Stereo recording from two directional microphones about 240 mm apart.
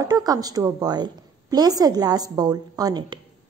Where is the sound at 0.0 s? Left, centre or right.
Centre.